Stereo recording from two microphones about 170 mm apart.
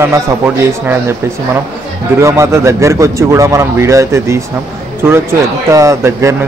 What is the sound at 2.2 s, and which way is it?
Speech, 15° right (ahead or behind).